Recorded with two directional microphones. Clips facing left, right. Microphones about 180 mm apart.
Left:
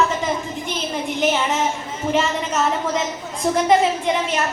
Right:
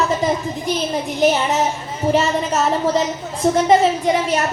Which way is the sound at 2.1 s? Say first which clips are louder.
Right 2 dB; 35° right (ahead or behind).